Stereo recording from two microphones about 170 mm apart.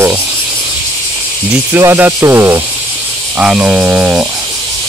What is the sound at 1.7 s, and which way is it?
Speech, 15° right (ahead or behind).